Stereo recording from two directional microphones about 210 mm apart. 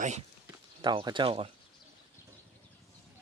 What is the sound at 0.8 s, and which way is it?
Speech, 20° right (ahead or behind).